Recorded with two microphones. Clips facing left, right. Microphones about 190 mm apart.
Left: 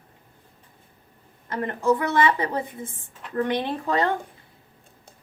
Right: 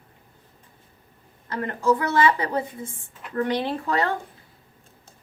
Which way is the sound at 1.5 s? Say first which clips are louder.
Even; 20° left (ahead or behind).